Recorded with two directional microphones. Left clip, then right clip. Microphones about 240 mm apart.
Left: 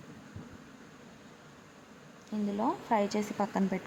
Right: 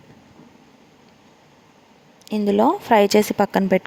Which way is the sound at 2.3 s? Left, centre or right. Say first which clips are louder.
Right 15 dB; right.